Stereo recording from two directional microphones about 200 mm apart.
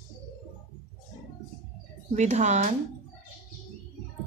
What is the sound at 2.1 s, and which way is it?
Speech, 35° right (ahead or behind).